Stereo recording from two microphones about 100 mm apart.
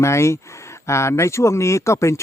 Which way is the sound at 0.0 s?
30° left (ahead or behind).